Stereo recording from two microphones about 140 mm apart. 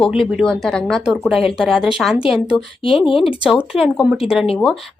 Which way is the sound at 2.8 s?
40° left (ahead or behind).